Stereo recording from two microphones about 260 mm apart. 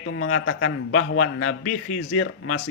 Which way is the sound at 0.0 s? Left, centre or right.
Left.